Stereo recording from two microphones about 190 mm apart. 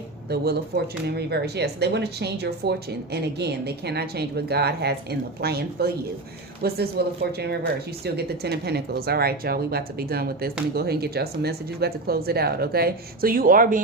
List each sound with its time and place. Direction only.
1.0 s speech: 60° right (ahead or behind)